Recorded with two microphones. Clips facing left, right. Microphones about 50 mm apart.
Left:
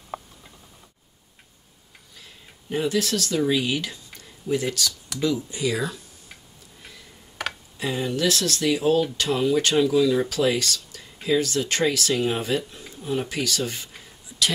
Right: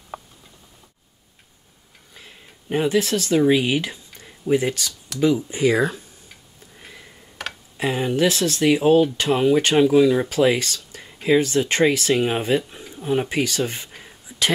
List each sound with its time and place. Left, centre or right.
2.1 s speech: right
7.4 s tick: centre
7.7 s speech: right